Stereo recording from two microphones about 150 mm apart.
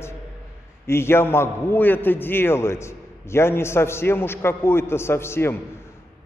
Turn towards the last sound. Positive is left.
turn(degrees=15)  # may be behind; listen again after turning